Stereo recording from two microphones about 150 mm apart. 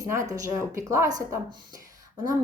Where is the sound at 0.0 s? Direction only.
20° right (ahead or behind).